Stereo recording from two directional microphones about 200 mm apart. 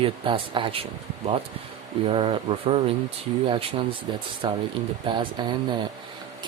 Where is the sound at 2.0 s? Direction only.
25° right (ahead or behind).